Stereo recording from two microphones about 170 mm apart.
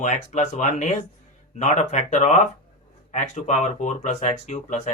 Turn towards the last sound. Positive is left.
turn(degrees=45)  # may be behind; listen again after turning